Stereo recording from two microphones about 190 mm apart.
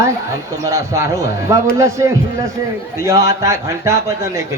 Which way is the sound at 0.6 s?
15° right (ahead or behind).